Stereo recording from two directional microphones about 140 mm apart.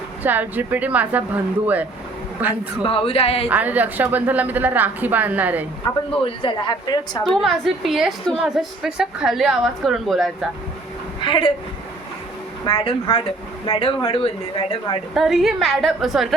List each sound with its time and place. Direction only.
0.2 s a woman's voice: 15° right (ahead or behind)
2.8 s speech: 40° left (ahead or behind)
3.5 s a woman's voice: 10° right (ahead or behind)
6.1 s speech: 40° left (ahead or behind)
7.3 s a woman's voice: centre (ahead or behind)
11.2 s speech: 40° left (ahead or behind)
12.6 s speech: 40° left (ahead or behind)
15.1 s a woman's voice: centre (ahead or behind)